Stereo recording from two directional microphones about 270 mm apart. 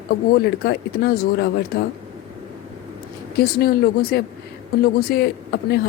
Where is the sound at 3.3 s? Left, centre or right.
Left.